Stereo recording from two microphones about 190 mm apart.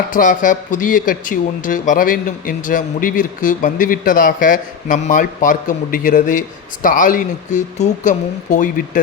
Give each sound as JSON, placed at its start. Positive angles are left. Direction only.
{"t": 0.1, "sound": "speech", "side_deg": 45}